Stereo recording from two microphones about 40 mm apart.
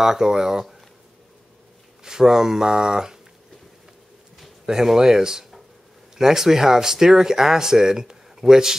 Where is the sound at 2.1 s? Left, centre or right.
Centre.